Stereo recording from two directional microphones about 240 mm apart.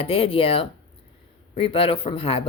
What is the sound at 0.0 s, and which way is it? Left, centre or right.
A woman's voice, left.